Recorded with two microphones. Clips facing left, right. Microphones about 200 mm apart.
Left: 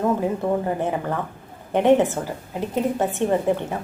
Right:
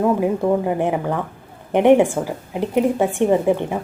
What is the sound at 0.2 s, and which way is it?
A woman's voice, 15° right (ahead or behind).